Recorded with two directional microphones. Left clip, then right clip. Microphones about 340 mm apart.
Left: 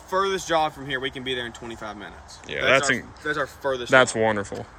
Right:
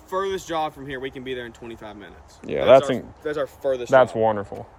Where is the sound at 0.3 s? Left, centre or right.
Centre.